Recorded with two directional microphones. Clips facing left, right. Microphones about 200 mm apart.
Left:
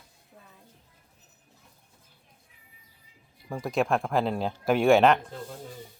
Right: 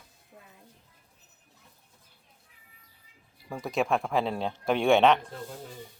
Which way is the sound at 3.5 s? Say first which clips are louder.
Left 1 dB; centre (ahead or behind).